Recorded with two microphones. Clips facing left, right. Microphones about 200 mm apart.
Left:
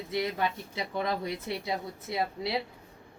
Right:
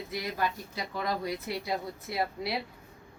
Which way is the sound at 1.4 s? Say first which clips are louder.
Even; 25° left (ahead or behind).